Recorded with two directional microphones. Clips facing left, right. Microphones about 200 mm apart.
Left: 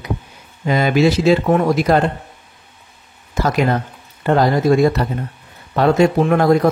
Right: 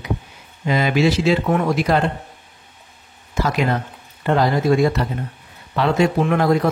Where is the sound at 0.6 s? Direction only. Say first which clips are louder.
Left 3 dB; 45° left (ahead or behind).